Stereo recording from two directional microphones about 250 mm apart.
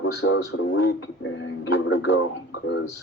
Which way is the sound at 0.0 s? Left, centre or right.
Left.